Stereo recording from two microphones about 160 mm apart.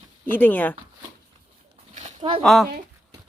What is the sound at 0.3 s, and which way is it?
Speech, 10° left (ahead or behind).